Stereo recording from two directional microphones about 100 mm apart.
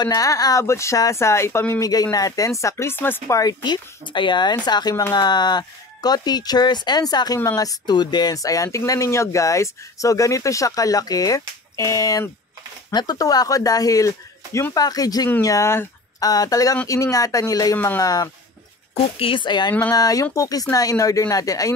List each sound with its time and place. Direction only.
0.0 s speech: 35° left (ahead or behind)
1.8 s speech: 40° left (ahead or behind); by 3.3 s 20° left (ahead or behind)
3.3 s speech: 45° left (ahead or behind); by 15.9 s 25° left (ahead or behind)
16.2 s speech: 40° left (ahead or behind)
17.7 s speech: 25° left (ahead or behind)
18.0 s speech: 35° left (ahead or behind)
18.9 s speech: 70° left (ahead or behind); by 19.7 s 50° left (ahead or behind)
19.9 s speech: 35° left (ahead or behind)